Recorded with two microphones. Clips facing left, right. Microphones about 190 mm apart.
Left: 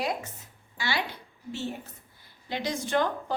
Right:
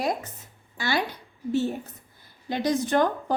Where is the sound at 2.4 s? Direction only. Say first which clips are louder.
Right 6 dB; 45° right (ahead or behind).